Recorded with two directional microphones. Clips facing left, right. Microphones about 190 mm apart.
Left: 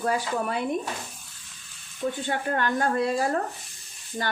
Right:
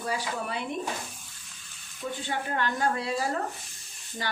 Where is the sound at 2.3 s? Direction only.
50° left (ahead or behind).